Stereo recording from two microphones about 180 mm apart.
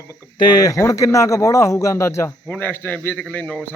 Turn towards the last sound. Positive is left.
turn(degrees=10)  # may be behind; listen again after turning